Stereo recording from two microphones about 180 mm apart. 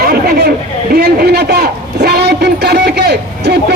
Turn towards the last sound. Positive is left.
turn(degrees=-65)  # may be behind; listen again after turning